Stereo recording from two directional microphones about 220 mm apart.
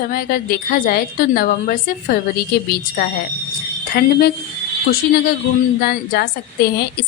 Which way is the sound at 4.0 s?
45° left (ahead or behind).